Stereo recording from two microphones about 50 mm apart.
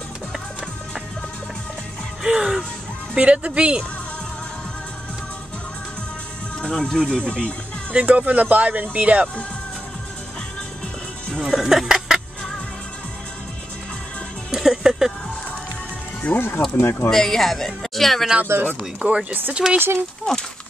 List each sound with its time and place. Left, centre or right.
2.2 s music: centre
3.2 s speech: right
6.6 s speech: centre
7.9 s speech: right
11.3 s speech: centre
14.5 s music: centre
16.2 s speech: left
16.7 s speech: left
17.1 s speech: centre
18.5 s speech: right
18.9 s speech: right
20.3 s speech: centre